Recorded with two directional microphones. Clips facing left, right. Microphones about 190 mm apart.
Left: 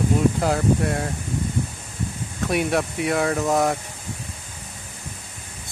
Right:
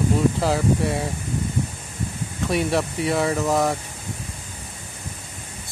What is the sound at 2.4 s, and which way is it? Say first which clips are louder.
Speech: even; centre (ahead or behind).